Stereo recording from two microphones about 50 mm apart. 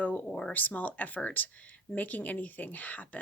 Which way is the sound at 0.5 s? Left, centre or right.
Left.